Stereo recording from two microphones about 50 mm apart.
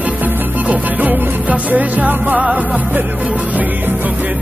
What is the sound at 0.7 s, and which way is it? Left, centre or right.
Music, right.